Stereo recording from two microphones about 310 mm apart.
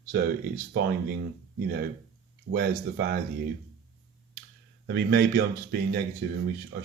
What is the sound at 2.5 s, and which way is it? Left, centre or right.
Speech, right.